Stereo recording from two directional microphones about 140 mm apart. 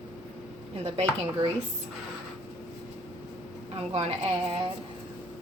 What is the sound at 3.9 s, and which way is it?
Speech, 45° right (ahead or behind).